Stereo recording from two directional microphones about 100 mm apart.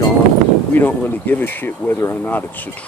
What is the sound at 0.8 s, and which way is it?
Speech, 20° left (ahead or behind).